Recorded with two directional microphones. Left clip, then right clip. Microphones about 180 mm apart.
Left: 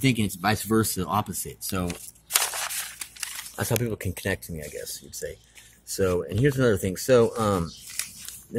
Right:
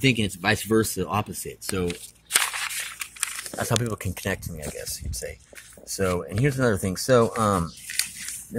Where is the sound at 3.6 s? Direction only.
5° left (ahead or behind).